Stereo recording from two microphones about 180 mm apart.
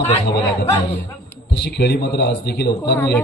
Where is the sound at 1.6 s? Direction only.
65° left (ahead or behind).